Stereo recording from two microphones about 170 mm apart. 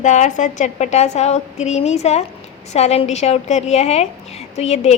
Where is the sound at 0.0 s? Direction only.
45° left (ahead or behind).